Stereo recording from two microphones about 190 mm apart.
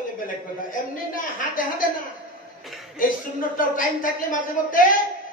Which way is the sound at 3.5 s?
45° left (ahead or behind).